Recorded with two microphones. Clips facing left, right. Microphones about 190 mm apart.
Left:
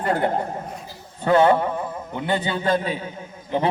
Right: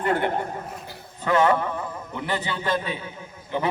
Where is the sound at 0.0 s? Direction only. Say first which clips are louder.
Left 2 dB; 35° left (ahead or behind).